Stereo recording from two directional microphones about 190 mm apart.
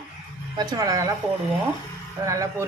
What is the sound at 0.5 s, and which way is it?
Speech, 20° right (ahead or behind).